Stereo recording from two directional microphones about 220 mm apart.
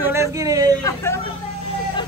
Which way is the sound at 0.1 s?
15° right (ahead or behind).